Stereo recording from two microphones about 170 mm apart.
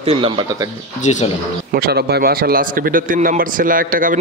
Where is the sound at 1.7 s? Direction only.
70° right (ahead or behind).